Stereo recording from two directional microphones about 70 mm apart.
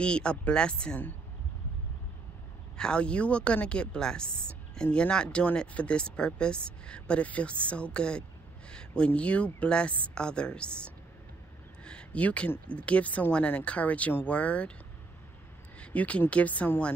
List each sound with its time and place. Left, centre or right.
0.0 s speech: centre
2.8 s speech: centre
15.8 s speech: centre